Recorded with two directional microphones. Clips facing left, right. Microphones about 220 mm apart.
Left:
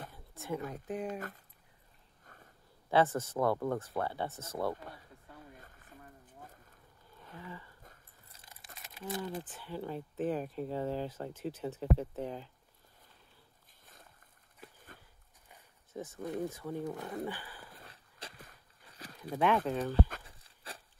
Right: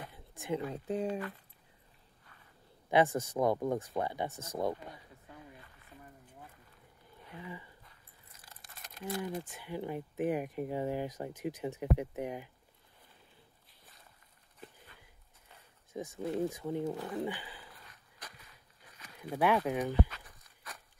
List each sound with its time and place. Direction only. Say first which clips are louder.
0.1 s a sound: right 4 dB; 15° right (ahead or behind)
0.7 s speech: right 3 dB; 25° right (ahead or behind)
2.2 s a sound: left 6 dB; 45° left (ahead or behind)
2.9 s speech: right 1 dB; 15° right (ahead or behind)
5.6 s a sound: left 1 dB; 45° left (ahead or behind)
7.3 s speech: right 2 dB; 15° right (ahead or behind)
8.7 s crumpling: right 1 dB; centre (ahead or behind)
9.0 s speech: right 1 dB; 10° right (ahead or behind)
15.9 s speech: right 3 dB; 15° right (ahead or behind)
17.8 s wheeze: left 3 dB; 30° left (ahead or behind)
19.1 s speech: even; 10° right (ahead or behind)
20.2 s a sound: left 2 dB; 30° left (ahead or behind)